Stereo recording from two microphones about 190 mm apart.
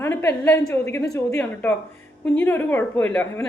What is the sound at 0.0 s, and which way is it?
A woman's voice, 10° left (ahead or behind).